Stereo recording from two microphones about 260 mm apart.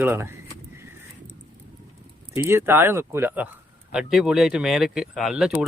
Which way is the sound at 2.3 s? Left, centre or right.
Centre.